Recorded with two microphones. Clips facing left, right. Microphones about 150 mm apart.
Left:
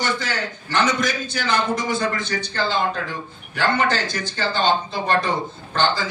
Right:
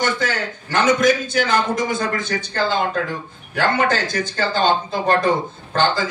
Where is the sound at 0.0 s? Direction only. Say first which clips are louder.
Right 3 dB; 50° right (ahead or behind).